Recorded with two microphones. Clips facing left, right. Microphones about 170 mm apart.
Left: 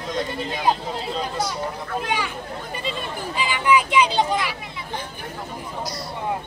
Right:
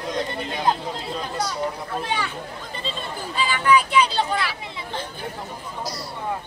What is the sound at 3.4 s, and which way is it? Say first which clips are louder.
Speech: right 1 dB; 15° left (ahead or behind).